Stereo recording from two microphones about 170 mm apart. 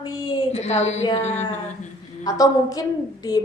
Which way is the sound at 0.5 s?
40° left (ahead or behind).